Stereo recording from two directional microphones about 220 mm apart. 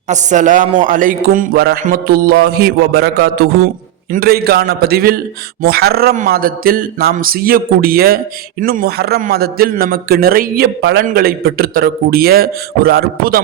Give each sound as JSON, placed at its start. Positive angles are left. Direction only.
{"t": 0.1, "sound": "a man's voice", "side_deg": -35}